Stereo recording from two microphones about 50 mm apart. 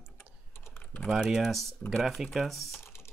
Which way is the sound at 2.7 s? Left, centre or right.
Left.